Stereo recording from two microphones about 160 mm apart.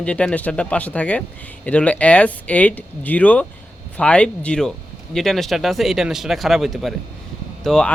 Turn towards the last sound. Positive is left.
turn(degrees=5)  # may be behind; listen again after turning